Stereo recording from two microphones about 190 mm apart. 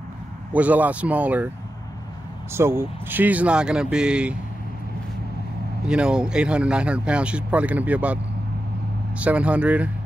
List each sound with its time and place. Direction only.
0.5 s speech: 10° right (ahead or behind)
2.5 s speech: 10° right (ahead or behind)
5.9 s speech: 5° right (ahead or behind)
9.2 s speech: 5° right (ahead or behind)